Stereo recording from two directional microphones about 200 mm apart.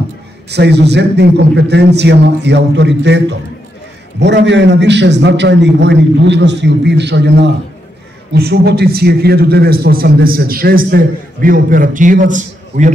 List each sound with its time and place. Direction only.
0.5 s a man's voice: 55° right (ahead or behind); by 12.9 s 40° right (ahead or behind)